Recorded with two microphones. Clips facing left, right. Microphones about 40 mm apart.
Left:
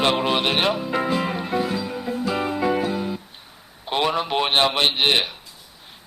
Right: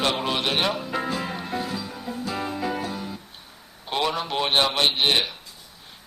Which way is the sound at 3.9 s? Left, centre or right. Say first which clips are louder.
Left 4 dB; centre.